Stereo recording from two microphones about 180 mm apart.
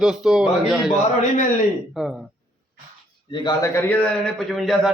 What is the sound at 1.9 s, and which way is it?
Speech, 5° right (ahead or behind).